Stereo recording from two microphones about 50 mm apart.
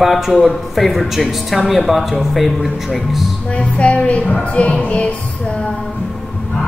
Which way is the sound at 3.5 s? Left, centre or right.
Left.